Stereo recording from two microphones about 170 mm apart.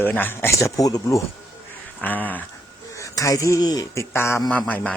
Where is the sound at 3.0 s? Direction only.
20° left (ahead or behind).